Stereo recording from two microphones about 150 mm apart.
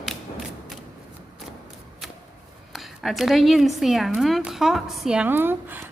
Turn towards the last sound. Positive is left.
turn(degrees=-15)  # may be behind; listen again after turning